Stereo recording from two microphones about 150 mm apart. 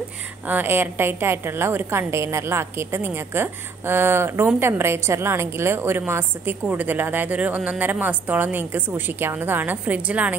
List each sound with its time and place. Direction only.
0.5 s a woman's voice: 10° right (ahead or behind)